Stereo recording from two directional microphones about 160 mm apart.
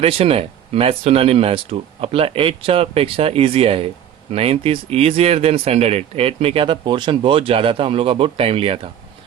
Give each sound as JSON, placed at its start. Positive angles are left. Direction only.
{"t": 0.0, "sound": "speech", "side_deg": -35}